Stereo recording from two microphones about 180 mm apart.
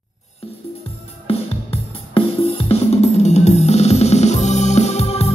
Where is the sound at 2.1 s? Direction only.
35° left (ahead or behind).